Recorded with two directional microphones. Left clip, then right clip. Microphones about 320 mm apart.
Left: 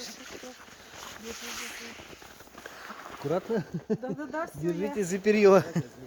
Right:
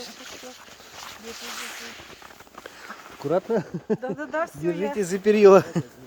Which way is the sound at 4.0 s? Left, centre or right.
Right.